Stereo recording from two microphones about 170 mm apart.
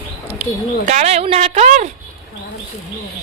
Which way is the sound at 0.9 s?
40° right (ahead or behind).